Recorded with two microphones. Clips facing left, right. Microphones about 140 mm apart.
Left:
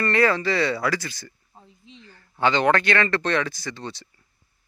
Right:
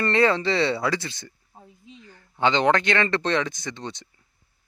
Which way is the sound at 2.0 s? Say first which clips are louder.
Even; 10° right (ahead or behind).